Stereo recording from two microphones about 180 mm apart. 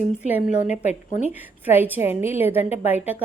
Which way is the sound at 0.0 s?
45° left (ahead or behind).